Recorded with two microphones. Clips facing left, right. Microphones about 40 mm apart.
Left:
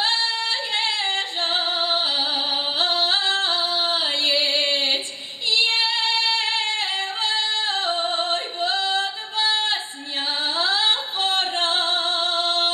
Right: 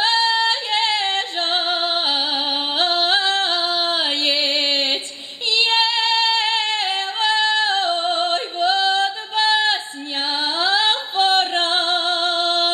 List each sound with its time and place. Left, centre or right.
0.0 s yodeling: right
2.8 s music: right
5.5 s female singing: right
10.4 s music: right